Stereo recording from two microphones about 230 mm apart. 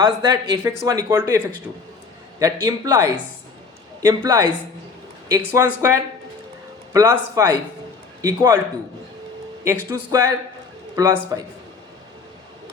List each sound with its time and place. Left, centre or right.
0.0 s speech: centre
2.4 s speech: centre
9.6 s speech: centre